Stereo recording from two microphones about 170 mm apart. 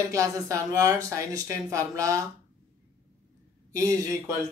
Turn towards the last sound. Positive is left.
turn(degrees=-20)  # may be behind; listen again after turning